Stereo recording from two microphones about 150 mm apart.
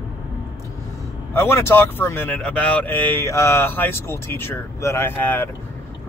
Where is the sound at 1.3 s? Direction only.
15° left (ahead or behind).